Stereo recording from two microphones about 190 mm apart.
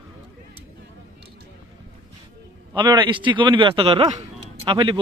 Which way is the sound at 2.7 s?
25° right (ahead or behind).